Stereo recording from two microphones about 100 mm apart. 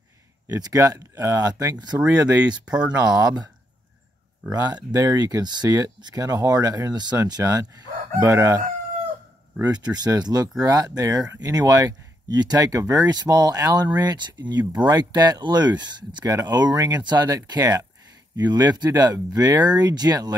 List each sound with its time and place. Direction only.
0.5 s speech: 40° right (ahead or behind)
2.0 s speech: 15° right (ahead or behind)
4.5 s speech: 35° right (ahead or behind)
8.2 s crowing: 30° right (ahead or behind)
10.1 s speech: 40° right (ahead or behind)